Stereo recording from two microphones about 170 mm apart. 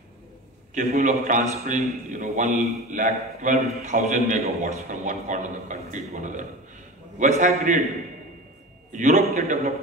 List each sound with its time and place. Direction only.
0.7 s a man's voice: 45° right (ahead or behind)
8.9 s a man's voice: 45° right (ahead or behind)